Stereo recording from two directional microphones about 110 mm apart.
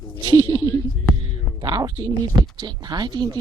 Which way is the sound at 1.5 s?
35° right (ahead or behind).